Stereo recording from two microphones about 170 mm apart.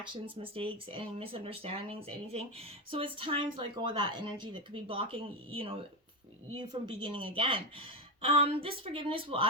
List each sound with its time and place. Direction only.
0.0 s speech: 30° right (ahead or behind)